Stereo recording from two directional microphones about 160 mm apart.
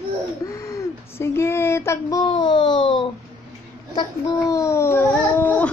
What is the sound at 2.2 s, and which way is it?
A child's voice, 30° left (ahead or behind).